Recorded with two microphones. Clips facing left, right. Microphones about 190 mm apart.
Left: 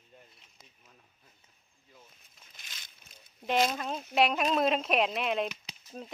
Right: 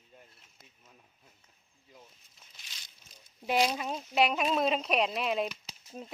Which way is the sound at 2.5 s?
50° left (ahead or behind).